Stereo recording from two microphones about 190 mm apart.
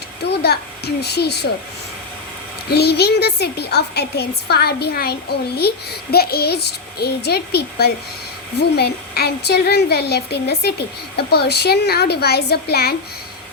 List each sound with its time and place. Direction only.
0.3 s a woman's voice: 55° left (ahead or behind)
2.6 s a woman's voice: 60° left (ahead or behind)